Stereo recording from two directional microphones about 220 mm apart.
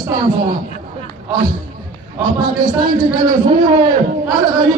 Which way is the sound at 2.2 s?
15° right (ahead or behind).